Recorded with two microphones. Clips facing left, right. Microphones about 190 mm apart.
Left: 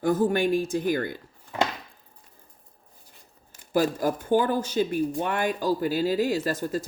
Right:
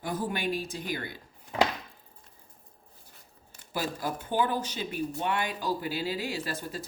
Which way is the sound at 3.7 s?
45° left (ahead or behind).